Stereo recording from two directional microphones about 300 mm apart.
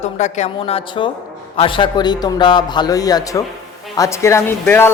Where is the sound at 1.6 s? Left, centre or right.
Centre.